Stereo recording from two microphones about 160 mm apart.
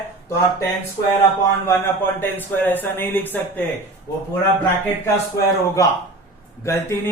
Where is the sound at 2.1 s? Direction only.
10° left (ahead or behind).